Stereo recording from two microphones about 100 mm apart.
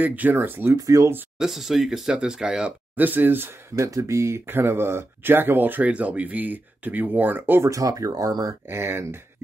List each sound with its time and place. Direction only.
0.0 s speech: 15° right (ahead or behind)
0.7 s speech: 35° right (ahead or behind)
1.4 s speech: 5° right (ahead or behind)
3.0 s speech: 20° right (ahead or behind)
7.7 s speech: 35° right (ahead or behind)
8.6 s speech: 25° right (ahead or behind)